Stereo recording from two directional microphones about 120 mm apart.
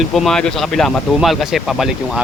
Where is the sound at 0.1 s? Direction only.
5° left (ahead or behind).